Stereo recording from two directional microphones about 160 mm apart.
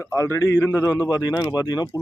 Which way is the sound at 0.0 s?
15° left (ahead or behind).